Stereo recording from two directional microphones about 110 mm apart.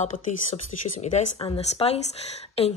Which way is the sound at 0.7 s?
90° left.